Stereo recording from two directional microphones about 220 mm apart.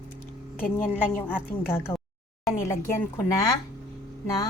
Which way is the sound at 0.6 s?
35° left (ahead or behind).